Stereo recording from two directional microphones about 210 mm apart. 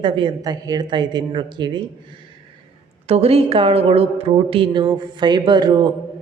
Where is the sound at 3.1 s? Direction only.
30° right (ahead or behind).